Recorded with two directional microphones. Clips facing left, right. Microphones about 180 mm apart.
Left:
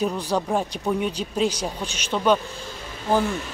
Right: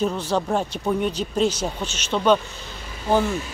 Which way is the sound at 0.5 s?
Centre (ahead or behind).